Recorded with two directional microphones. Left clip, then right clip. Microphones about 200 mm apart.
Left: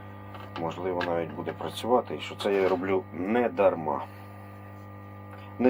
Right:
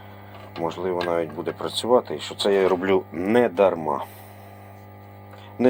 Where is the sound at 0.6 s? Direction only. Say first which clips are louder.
Right 5 dB; 55° right (ahead or behind).